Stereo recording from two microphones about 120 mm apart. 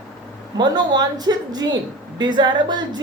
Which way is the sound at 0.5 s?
35° right (ahead or behind).